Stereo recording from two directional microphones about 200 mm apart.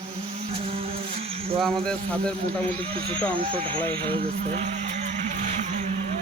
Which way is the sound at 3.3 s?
25° right (ahead or behind).